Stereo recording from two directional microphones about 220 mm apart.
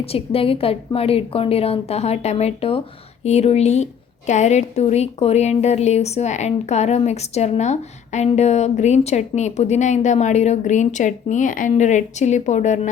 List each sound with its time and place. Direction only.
0.0 s a woman's voice: 25° left (ahead or behind)